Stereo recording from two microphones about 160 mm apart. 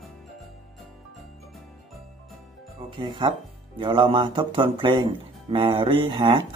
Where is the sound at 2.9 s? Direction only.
30° right (ahead or behind).